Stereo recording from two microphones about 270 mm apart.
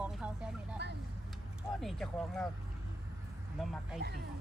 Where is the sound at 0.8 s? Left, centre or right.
Right.